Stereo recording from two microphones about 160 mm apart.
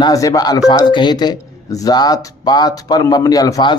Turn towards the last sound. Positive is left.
turn(degrees=20)  # may be behind; listen again after turning